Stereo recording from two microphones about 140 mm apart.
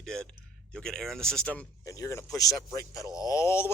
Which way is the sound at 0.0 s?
5° left (ahead or behind).